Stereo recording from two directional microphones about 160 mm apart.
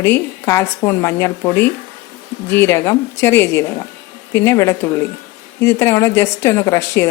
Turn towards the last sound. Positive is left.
turn(degrees=20)  # may be behind; listen again after turning